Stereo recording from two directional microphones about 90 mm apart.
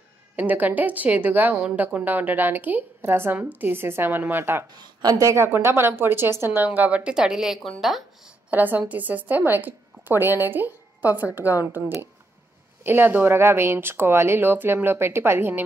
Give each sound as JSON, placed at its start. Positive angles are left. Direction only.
{"t": 0.4, "sound": "a woman's voice", "side_deg": -20}
{"t": 5.0, "sound": "a woman's voice", "side_deg": -45}
{"t": 5.3, "sound": "a woman's voice", "side_deg": -25}
{"t": 8.5, "sound": "a woman's voice", "side_deg": -20}